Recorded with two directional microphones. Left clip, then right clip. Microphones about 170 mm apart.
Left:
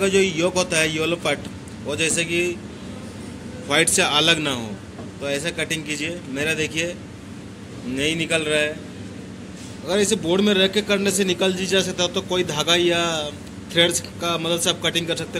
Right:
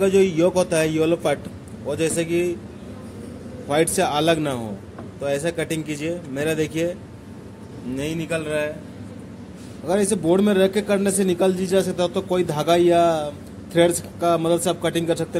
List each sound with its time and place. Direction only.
0.0 s speech: 50° right (ahead or behind)
3.6 s speech: 40° right (ahead or behind)
5.2 s speech: 65° right (ahead or behind)
7.9 s speech: 45° right (ahead or behind)
9.8 s speech: 60° right (ahead or behind)